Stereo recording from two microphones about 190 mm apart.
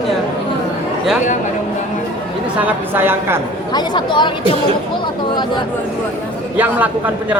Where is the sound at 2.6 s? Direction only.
10° right (ahead or behind).